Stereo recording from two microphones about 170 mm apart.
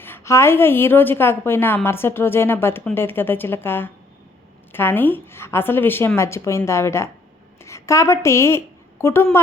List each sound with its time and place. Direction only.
0.0 s a woman's voice: 15° left (ahead or behind)